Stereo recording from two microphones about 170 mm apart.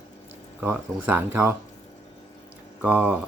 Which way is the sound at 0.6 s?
10° right (ahead or behind).